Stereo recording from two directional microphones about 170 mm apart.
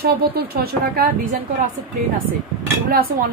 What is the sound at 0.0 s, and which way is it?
Speech, 65° right (ahead or behind).